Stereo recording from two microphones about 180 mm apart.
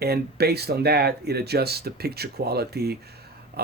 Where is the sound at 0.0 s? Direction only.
60° right (ahead or behind).